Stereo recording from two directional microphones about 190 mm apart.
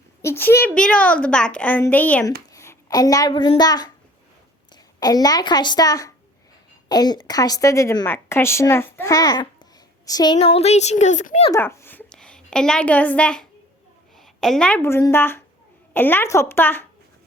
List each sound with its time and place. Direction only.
0.2 s a woman's voice: 15° left (ahead or behind)
10.1 s a sound: 20° left (ahead or behind)
10.3 s speech: 30° left (ahead or behind)
11.5 s a woman's voice: 15° left (ahead or behind)